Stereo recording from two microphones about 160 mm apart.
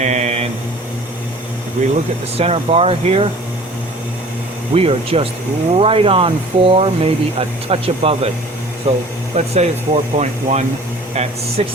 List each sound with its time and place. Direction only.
0.0 s a sound: 45° right (ahead or behind)
2.4 s speech: 40° right (ahead or behind)
4.7 s speech: 35° right (ahead or behind)